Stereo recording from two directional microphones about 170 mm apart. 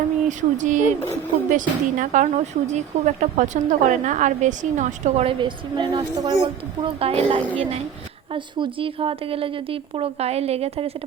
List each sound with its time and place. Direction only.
0.3 s a woman's voice: 45° right (ahead or behind)